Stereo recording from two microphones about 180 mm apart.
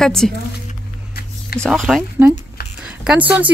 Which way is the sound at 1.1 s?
55° left (ahead or behind).